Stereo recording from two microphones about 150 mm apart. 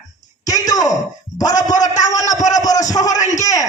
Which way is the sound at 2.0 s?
25° left (ahead or behind).